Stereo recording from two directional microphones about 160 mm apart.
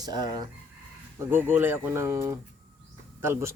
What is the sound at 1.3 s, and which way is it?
Speech, 15° right (ahead or behind).